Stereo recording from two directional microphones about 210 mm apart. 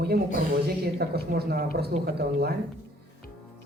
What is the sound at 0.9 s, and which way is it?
Speech, 50° right (ahead or behind).